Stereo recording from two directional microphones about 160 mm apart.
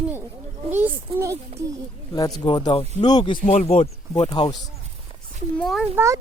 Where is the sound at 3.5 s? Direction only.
45° left (ahead or behind).